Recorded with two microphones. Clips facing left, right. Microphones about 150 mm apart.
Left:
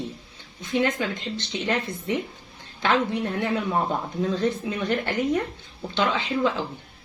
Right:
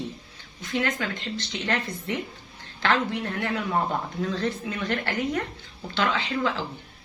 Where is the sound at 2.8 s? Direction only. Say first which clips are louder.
Left 2 dB; 15° left (ahead or behind).